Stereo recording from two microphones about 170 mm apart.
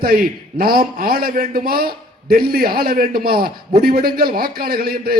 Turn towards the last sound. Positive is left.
turn(degrees=-60)  # may be behind; listen again after turning